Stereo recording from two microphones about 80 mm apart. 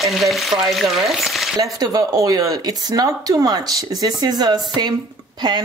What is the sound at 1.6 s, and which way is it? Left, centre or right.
Speech, right.